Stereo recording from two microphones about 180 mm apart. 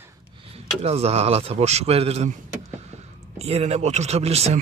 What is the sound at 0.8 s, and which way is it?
Speech, 35° right (ahead or behind).